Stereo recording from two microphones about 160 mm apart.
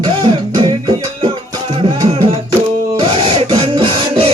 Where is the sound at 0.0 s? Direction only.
30° right (ahead or behind).